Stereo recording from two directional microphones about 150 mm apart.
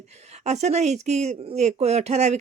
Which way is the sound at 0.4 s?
50° right (ahead or behind).